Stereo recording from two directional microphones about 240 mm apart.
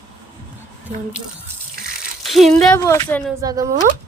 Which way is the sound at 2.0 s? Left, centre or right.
Centre.